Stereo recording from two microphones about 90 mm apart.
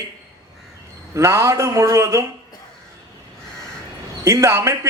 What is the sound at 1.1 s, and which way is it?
A man's voice, 30° right (ahead or behind).